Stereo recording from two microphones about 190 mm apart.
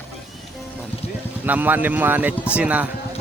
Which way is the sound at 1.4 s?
10° right (ahead or behind).